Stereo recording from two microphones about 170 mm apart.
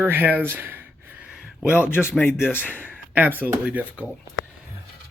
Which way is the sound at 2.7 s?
10° left (ahead or behind).